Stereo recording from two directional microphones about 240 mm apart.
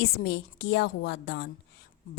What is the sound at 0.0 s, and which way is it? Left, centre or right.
A woman's voice, left.